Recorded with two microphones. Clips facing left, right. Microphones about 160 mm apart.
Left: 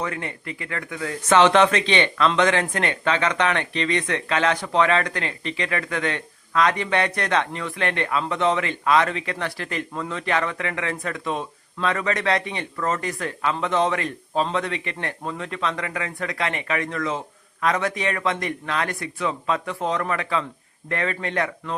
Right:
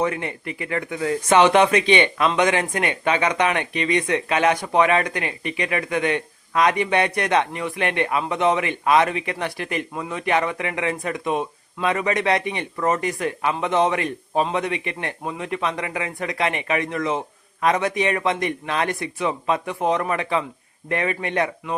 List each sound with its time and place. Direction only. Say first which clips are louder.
0.0 s speech: right 5 dB; 25° right (ahead or behind)
1.3 s speech: right 1 dB; 15° right (ahead or behind)